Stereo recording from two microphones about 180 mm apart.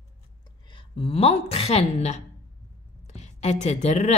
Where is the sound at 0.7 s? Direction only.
30° left (ahead or behind).